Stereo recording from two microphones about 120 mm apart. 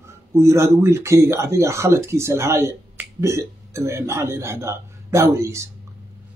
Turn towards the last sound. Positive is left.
turn(degrees=-25)  # may be behind; listen again after turning